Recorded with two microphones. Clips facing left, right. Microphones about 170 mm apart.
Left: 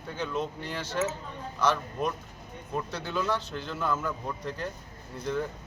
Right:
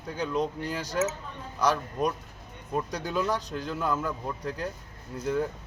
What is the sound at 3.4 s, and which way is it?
Speech, 40° right (ahead or behind).